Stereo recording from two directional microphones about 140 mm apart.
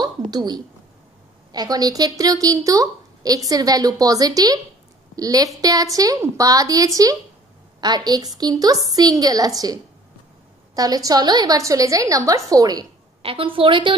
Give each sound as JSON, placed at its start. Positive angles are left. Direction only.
{"t": 0.0, "sound": "a woman's voice", "side_deg": -30}
{"t": 13.2, "sound": "a woman's voice", "side_deg": -40}